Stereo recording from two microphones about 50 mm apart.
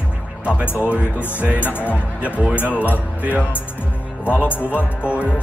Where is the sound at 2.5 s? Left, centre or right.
Left.